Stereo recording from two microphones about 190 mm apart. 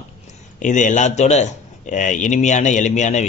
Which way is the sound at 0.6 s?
40° left (ahead or behind).